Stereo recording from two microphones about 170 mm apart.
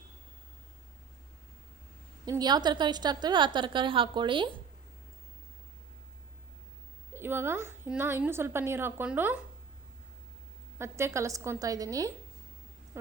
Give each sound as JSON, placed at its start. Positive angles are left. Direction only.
{"t": 2.2, "sound": "a woman's voice", "side_deg": -20}
{"t": 7.1, "sound": "a woman's voice", "side_deg": -15}
{"t": 10.8, "sound": "a woman's voice", "side_deg": -15}